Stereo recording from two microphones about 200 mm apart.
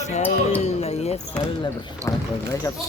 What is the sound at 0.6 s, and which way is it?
Basketball bounce, 30° left (ahead or behind).